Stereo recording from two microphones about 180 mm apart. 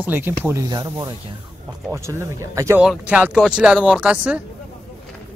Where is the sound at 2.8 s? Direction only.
5° right (ahead or behind).